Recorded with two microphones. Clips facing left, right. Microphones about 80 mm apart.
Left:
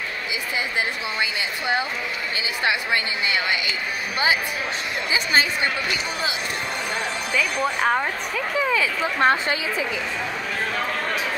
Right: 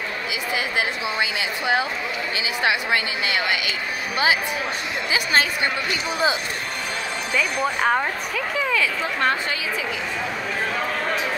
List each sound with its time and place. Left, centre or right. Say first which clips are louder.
5.1 s speech: even; centre
7.3 s speech: right 1 dB; centre
8.6 s speech: even; centre
9.2 s a woman's voice: left 4 dB; left